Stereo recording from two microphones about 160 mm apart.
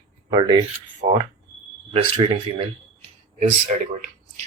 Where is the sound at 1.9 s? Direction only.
35° right (ahead or behind).